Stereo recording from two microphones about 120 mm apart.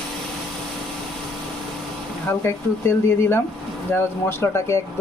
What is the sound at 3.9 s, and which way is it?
Speech, 20° left (ahead or behind).